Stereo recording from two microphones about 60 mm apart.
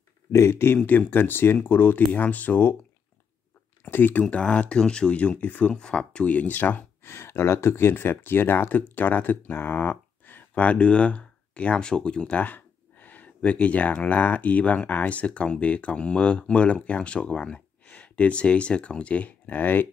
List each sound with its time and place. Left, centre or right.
0.3 s speech: left
3.8 s speech: left
5.7 s speech: centre; by 7.1 s left
7.1 s speech: left